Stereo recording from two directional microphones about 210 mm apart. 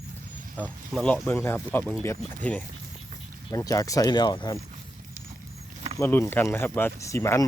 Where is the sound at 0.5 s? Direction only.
5° left (ahead or behind).